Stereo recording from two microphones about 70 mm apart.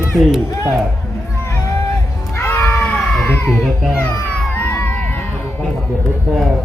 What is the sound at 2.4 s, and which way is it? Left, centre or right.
Cat, left.